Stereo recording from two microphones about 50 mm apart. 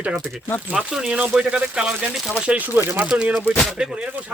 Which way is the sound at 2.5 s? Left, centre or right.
Right.